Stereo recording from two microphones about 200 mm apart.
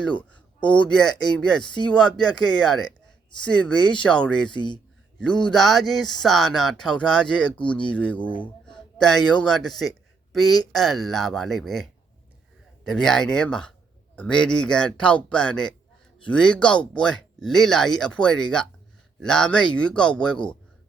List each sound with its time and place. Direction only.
0.0 s speech: 5° left (ahead or behind)
4.5 s speech: 25° left (ahead or behind)
5.5 s speech: centre (ahead or behind)